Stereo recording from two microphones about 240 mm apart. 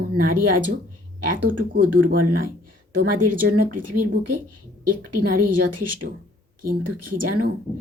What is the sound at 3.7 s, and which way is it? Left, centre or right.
Speech, right.